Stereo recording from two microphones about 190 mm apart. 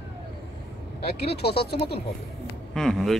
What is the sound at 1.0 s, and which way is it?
Speech, 30° left (ahead or behind).